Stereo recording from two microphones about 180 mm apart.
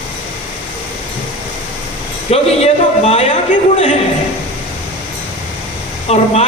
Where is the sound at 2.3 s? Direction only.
35° left (ahead or behind).